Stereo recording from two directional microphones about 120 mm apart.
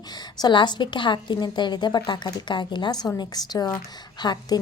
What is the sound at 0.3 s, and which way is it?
A woman's voice, 40° left (ahead or behind).